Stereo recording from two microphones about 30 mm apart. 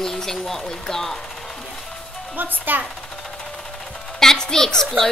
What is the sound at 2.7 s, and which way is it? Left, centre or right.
Speech, right.